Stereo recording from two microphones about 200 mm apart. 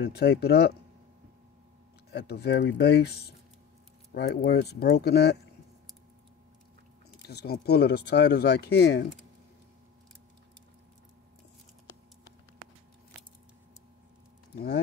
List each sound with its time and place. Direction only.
0.0 s speech: 55° left (ahead or behind)
2.0 s speech: 55° left (ahead or behind)
7.2 s speech: 55° left (ahead or behind)
14.5 s speech: 55° left (ahead or behind)